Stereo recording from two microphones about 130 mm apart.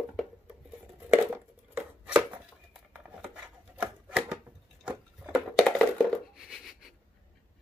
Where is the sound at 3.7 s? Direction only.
10° right (ahead or behind).